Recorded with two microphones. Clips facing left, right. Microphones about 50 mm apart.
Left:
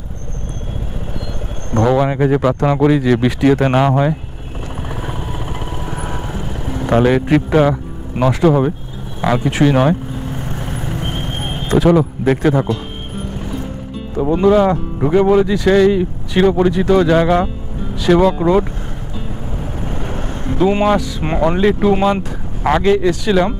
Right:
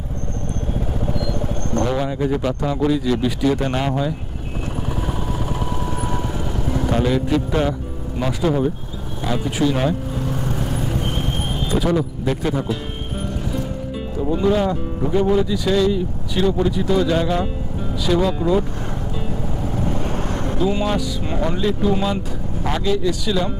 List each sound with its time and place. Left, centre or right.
1.9 s speech: left
4.8 s vehicle: left
6.1 s vehicle: left
6.9 s speech: left
8.2 s speech: left
10.5 s vehicle: left
11.0 s vehicle: left
11.7 s speech: left
14.1 s speech: left
20.5 s speech: left